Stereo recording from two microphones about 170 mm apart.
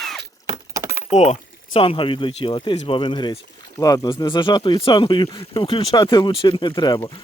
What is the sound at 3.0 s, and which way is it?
Speech, 25° left (ahead or behind).